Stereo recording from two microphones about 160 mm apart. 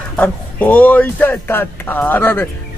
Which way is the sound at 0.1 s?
10° left (ahead or behind).